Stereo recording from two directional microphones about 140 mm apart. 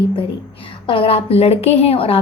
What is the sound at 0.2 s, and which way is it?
A woman's voice, 40° left (ahead or behind).